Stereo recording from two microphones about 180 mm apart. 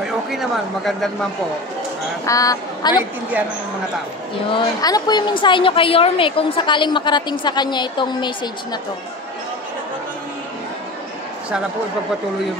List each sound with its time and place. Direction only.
0.3 s speech: centre (ahead or behind)
2.2 s a woman's voice: 20° left (ahead or behind)
4.5 s a woman's voice: 25° left (ahead or behind)